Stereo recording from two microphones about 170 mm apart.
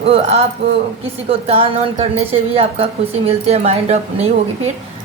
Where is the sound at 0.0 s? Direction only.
35° right (ahead or behind).